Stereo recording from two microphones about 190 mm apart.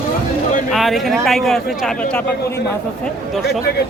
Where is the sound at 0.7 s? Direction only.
Centre (ahead or behind).